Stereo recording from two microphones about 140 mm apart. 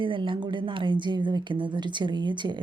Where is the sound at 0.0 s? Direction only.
35° right (ahead or behind).